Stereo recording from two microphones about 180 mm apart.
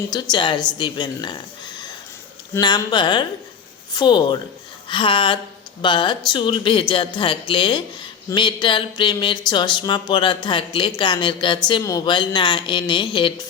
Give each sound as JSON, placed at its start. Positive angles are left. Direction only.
{"t": 0.1, "sound": "speech", "side_deg": 25}